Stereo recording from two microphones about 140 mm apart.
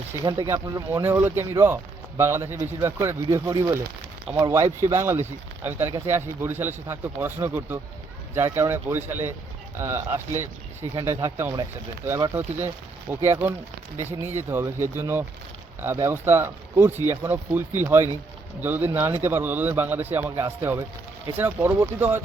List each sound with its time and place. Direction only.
0.3 s a man's voice: 20° right (ahead or behind)